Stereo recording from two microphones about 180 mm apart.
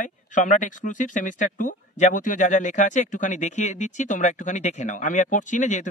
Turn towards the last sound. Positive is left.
turn(degrees=45)  # may be behind; listen again after turning